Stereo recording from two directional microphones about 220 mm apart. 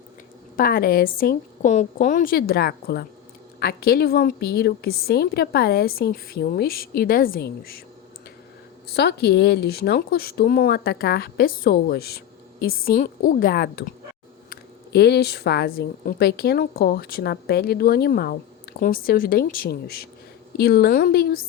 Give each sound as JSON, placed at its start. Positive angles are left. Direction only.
{"t": 0.5, "sound": "a woman's voice", "side_deg": 40}
{"t": 8.9, "sound": "a woman's voice", "side_deg": 45}